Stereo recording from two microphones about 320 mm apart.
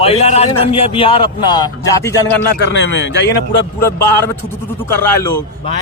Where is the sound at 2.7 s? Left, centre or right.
Left.